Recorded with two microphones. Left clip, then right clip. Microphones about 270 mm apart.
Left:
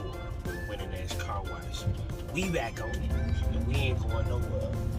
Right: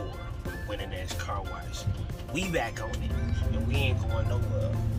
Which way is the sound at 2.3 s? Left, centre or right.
Centre.